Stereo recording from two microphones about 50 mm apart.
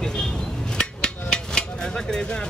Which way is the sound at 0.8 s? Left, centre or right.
Centre.